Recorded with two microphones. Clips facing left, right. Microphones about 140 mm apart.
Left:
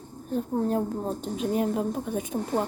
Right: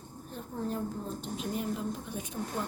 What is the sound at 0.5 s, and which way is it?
A woman's voice, 55° left (ahead or behind).